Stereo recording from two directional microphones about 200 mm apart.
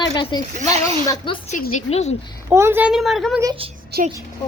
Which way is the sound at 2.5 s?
10° right (ahead or behind).